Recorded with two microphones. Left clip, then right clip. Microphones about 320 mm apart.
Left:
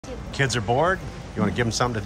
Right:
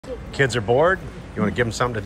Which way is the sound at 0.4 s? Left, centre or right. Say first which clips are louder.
Right 4 dB; centre.